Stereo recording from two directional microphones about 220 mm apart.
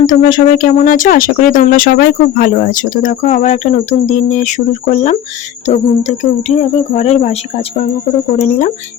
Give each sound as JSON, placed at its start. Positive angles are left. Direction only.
{"t": 0.0, "sound": "speech", "side_deg": 35}
{"t": 8.4, "sound": "speech", "side_deg": 35}